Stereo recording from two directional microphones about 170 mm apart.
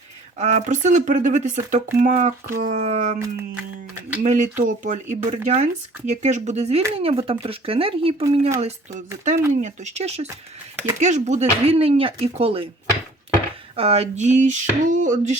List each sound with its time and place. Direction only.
0.3 s speech: 45° right (ahead or behind)
3.2 s speech: 10° right (ahead or behind)
4.2 s speech: 45° right (ahead or behind)
9.6 s speech: 45° right (ahead or behind)
13.7 s speech: 40° right (ahead or behind)